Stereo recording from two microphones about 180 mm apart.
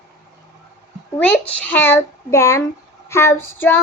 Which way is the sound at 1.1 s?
10° left (ahead or behind).